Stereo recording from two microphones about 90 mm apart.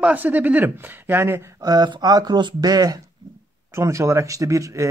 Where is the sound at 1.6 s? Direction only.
45° right (ahead or behind).